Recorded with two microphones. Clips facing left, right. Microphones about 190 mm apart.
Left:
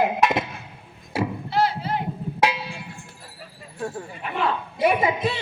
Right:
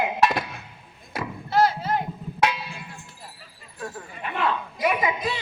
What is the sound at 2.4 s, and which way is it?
Music, 30° left (ahead or behind).